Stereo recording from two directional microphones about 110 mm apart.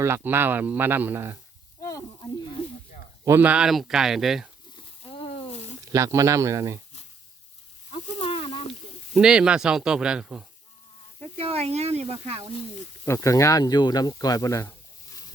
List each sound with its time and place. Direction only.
0.0 s speech: 20° right (ahead or behind)
1.8 s snake: 30° left (ahead or behind)
3.2 s speech: 20° right (ahead or behind)
3.5 s speech: 5° right (ahead or behind)
5.0 s a sound: 65° left (ahead or behind)
5.9 s speech: 30° right (ahead or behind)
8.2 s snake: 60° left (ahead or behind)
9.1 s speech: 5° right (ahead or behind)
11.2 s speech: 65° right (ahead or behind)
13.1 s speech: 30° left (ahead or behind)